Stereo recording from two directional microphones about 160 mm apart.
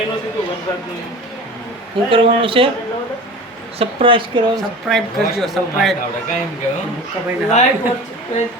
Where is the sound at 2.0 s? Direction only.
35° right (ahead or behind).